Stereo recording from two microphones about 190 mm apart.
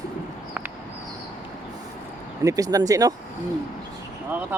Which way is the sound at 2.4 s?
20° right (ahead or behind).